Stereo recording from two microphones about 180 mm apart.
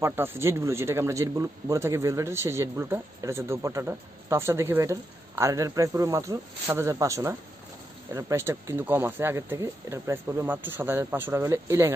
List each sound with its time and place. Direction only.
0.0 s speech: 15° right (ahead or behind)